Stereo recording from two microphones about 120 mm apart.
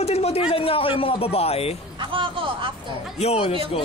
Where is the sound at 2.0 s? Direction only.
45° right (ahead or behind).